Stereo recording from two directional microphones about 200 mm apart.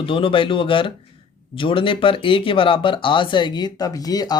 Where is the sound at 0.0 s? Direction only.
25° left (ahead or behind).